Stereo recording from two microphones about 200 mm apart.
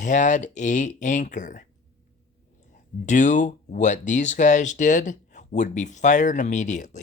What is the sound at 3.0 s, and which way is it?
Speech, 35° left (ahead or behind).